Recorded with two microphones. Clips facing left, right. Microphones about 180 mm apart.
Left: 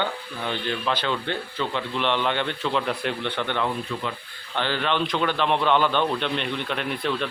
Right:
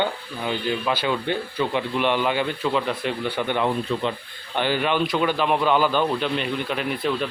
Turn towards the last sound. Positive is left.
turn(degrees=-5)  # may be behind; listen again after turning